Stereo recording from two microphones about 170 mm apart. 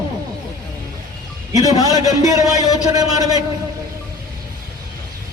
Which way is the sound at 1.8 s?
20° right (ahead or behind).